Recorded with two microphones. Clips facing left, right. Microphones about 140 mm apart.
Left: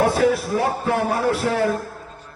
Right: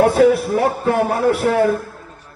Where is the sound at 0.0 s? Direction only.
60° right (ahead or behind).